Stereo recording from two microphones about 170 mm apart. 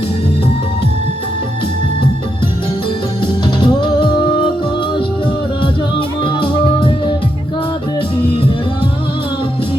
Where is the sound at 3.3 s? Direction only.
30° left (ahead or behind).